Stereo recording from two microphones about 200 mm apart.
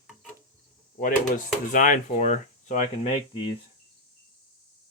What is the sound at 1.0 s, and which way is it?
Speech, 40° left (ahead or behind).